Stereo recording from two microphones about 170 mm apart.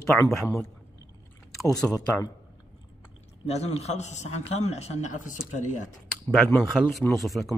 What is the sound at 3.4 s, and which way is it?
A man's voice, 35° left (ahead or behind).